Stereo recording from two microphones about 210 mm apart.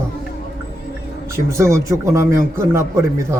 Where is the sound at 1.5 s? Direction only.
15° right (ahead or behind).